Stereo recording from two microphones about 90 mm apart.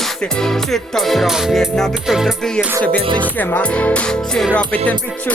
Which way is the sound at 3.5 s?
15° left (ahead or behind).